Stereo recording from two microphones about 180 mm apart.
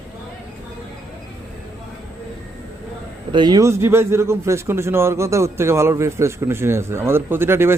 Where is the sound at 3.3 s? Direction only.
25° right (ahead or behind).